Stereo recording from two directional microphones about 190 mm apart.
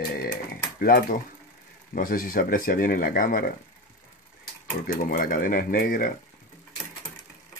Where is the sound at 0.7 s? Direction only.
50° left (ahead or behind).